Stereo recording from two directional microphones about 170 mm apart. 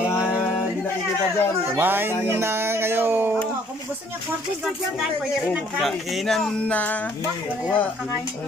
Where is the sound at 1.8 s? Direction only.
10° right (ahead or behind).